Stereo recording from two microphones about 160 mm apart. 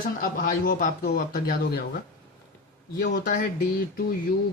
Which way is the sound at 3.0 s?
90° left.